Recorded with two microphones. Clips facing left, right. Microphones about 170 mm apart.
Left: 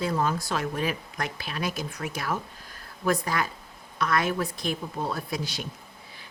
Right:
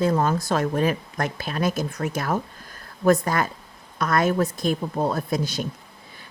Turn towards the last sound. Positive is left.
turn(degrees=-45)  # may be behind; listen again after turning